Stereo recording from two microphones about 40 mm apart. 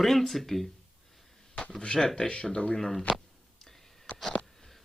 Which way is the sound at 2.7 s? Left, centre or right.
Centre.